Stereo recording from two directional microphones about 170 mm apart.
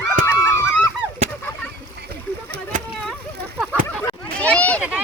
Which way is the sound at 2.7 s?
50° right (ahead or behind).